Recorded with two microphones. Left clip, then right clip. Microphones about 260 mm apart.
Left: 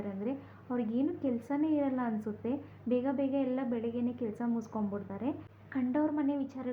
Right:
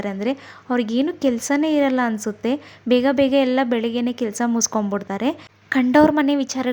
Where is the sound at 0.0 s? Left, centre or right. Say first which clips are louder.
Right 14 dB; right.